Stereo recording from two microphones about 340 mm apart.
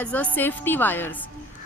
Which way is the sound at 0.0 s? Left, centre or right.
Centre.